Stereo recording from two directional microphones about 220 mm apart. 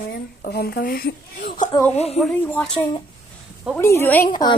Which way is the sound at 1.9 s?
30° left (ahead or behind).